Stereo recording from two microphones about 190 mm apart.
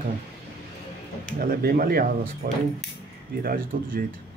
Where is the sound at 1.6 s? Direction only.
50° right (ahead or behind).